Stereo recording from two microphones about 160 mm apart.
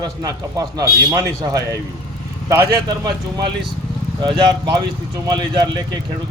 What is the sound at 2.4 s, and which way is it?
Speech, 15° right (ahead or behind).